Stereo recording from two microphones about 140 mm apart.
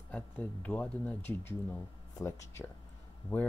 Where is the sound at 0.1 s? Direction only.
10° left (ahead or behind).